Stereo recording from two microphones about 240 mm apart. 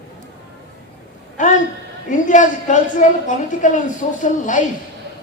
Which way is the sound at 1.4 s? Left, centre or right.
Left.